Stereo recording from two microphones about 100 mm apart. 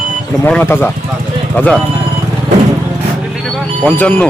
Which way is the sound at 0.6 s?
20° left (ahead or behind).